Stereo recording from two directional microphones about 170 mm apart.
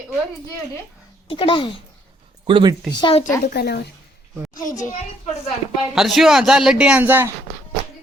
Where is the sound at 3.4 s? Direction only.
70° left (ahead or behind).